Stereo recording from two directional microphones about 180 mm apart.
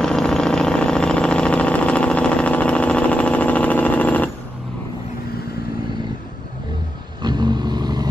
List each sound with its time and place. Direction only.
0.0 s vehicle: 5° left (ahead or behind)
7.2 s vehicle: 25° right (ahead or behind)